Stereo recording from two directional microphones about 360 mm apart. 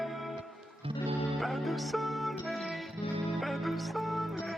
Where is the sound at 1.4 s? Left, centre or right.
Centre.